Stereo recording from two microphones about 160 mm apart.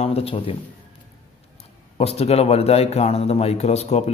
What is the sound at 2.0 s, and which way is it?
A man's voice, 40° left (ahead or behind).